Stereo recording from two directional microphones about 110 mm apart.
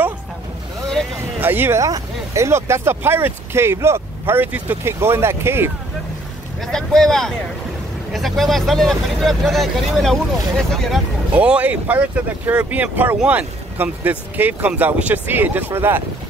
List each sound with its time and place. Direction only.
1.4 s speech: 20° right (ahead or behind)
1.8 s speech: 30° right (ahead or behind)
6.7 s speech: 5° left (ahead or behind)
11.3 s speech: 10° right (ahead or behind)